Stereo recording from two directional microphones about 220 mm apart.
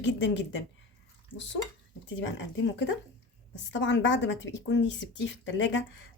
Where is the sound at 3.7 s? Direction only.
55° left (ahead or behind).